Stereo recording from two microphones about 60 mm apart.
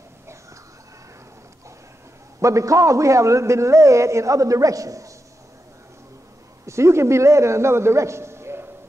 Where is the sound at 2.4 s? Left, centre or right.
Right.